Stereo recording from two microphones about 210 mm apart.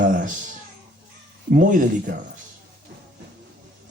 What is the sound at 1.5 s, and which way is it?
Speech, 40° right (ahead or behind).